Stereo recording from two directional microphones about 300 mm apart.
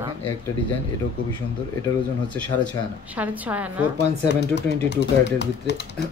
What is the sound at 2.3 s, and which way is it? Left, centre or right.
Speech, centre.